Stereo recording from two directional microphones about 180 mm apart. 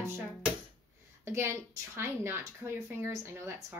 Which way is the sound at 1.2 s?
15° right (ahead or behind).